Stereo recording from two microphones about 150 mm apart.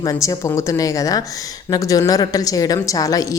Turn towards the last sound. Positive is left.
turn(degrees=25)  # may be behind; listen again after turning